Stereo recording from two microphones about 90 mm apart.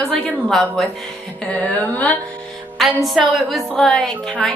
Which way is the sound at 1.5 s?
15° left (ahead or behind).